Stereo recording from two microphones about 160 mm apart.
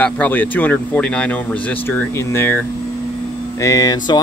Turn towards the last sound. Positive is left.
turn(degrees=20)  # may be behind; listen again after turning